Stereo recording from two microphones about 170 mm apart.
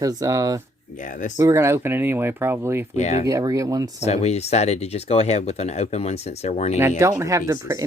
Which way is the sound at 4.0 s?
40° left (ahead or behind).